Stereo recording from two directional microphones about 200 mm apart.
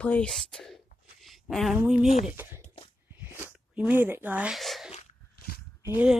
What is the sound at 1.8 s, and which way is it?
Speech, 5° right (ahead or behind).